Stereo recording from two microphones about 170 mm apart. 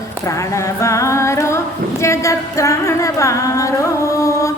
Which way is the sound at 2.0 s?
15° left (ahead or behind).